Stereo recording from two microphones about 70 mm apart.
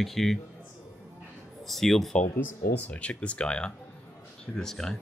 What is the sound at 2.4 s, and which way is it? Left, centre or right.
Speech, left.